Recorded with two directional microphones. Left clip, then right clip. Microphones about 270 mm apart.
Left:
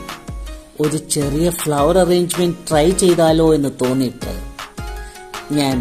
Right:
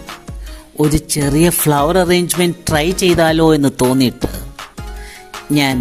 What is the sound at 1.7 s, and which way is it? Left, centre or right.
Speech, right.